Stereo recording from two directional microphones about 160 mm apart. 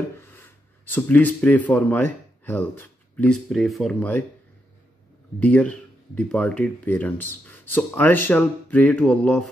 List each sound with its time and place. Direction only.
0.2 s speech: 15° left (ahead or behind)
5.4 s speech: 10° left (ahead or behind)